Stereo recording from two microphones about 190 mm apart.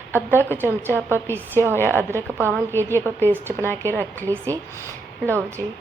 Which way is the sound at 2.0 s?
10° right (ahead or behind).